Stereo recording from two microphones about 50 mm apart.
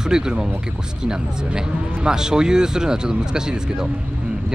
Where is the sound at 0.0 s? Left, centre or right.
Centre.